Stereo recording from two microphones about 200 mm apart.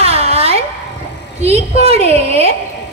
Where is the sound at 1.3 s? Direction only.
30° right (ahead or behind).